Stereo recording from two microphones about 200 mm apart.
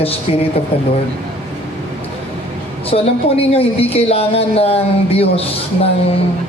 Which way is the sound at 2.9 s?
30° left (ahead or behind).